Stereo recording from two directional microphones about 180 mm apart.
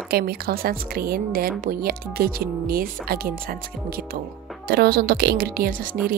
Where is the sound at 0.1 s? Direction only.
55° right (ahead or behind).